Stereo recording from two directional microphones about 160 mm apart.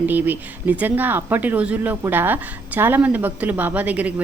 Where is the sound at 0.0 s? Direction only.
10° right (ahead or behind).